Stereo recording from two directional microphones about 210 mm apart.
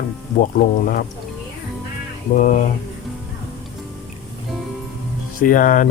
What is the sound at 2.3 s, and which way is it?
Speech, 35° left (ahead or behind).